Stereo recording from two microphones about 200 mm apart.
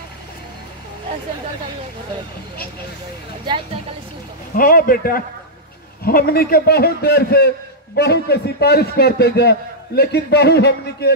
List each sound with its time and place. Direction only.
3.4 s a woman's voice: 25° right (ahead or behind)
4.6 s a man's voice: 45° left (ahead or behind)